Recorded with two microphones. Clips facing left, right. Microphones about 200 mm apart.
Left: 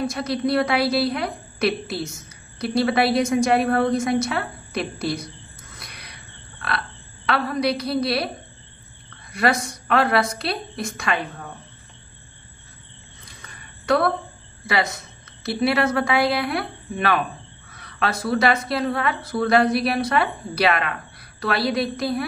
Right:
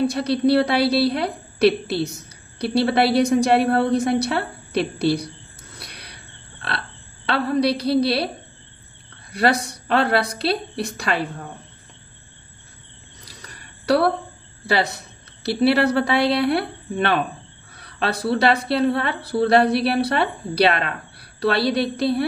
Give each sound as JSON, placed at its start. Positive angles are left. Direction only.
{"t": 0.0, "sound": "a woman's voice", "side_deg": -35}
{"t": 5.8, "sound": "a sound", "side_deg": -35}
{"t": 6.6, "sound": "burping", "side_deg": -30}
{"t": 7.2, "sound": "a woman's voice", "side_deg": -30}
{"t": 9.3, "sound": "a woman's voice", "side_deg": -35}
{"t": 13.2, "sound": "a sound", "side_deg": -35}
{"t": 14.7, "sound": "a woman's voice", "side_deg": -35}